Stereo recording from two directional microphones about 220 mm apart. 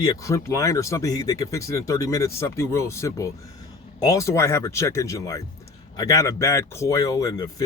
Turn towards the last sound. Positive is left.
turn(degrees=15)  # may be behind; listen again after turning